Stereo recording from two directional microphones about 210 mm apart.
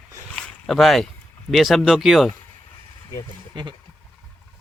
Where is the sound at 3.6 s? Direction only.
20° right (ahead or behind).